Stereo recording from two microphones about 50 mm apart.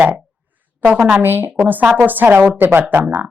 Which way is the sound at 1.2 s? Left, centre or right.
Right.